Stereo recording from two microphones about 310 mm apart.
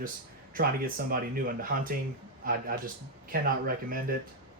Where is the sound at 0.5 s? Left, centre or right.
Right.